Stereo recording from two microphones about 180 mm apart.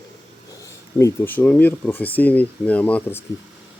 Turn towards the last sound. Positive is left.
turn(degrees=10)  # may be behind; listen again after turning